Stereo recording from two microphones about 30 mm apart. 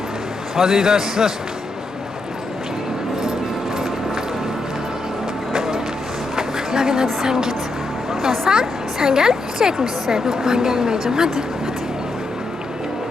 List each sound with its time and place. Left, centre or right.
0.5 s a man's voice: centre
3.8 s music: centre
5.5 s music: centre
6.3 s a sound: centre
8.4 s a woman's voice: right